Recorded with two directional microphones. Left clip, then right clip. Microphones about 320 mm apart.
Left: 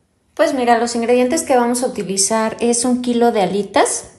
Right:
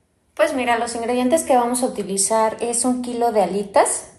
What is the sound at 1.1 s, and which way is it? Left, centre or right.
A woman's voice, left.